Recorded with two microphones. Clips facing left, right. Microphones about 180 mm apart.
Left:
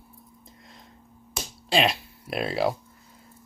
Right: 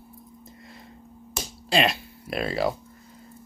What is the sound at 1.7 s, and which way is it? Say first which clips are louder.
Speech: even; centre (ahead or behind).